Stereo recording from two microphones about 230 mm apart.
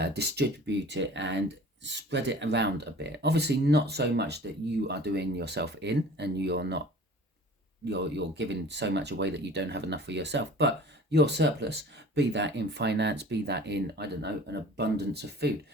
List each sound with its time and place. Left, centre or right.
0.0 s speech: right
7.9 s speech: right